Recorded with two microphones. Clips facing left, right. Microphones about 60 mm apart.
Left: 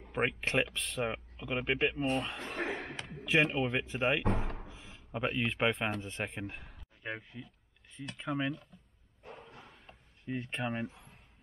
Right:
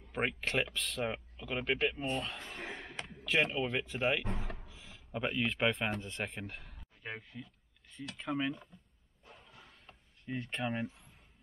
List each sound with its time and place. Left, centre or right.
0.1 s speech: centre
2.1 s speech: centre
2.4 s a sound: left
3.3 s speech: centre
4.2 s speech: left
4.6 s speech: centre
9.2 s a sound: left
10.2 s speech: centre